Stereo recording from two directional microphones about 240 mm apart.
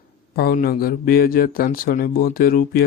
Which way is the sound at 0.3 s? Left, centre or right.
Left.